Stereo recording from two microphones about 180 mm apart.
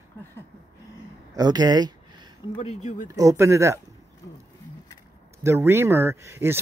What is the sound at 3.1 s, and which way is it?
Speech, 20° right (ahead or behind).